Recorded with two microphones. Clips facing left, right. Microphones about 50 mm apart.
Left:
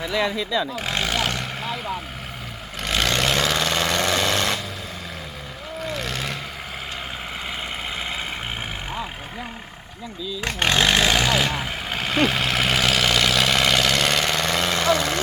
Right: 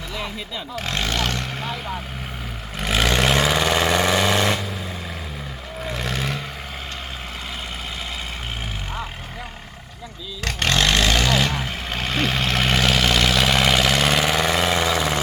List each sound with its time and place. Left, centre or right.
0.0 s speech: left
0.9 s vehicle: centre
2.7 s vehicle: centre
5.9 s vehicle: centre
10.4 s vehicle: centre